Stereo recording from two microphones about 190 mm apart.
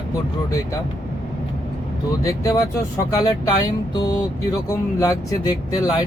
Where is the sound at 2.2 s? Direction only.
15° left (ahead or behind).